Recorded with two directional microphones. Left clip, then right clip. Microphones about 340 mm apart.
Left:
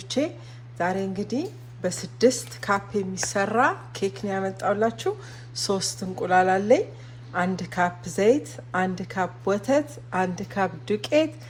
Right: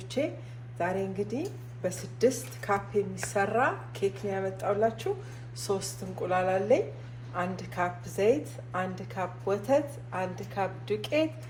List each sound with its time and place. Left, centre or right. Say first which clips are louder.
0.8 s a woman's voice: left 4 dB; left